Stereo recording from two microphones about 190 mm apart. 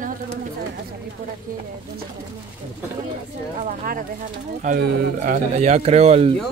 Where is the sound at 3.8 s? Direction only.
45° right (ahead or behind).